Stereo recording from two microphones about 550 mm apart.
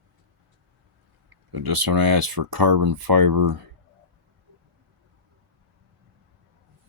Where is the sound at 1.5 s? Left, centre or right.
Right.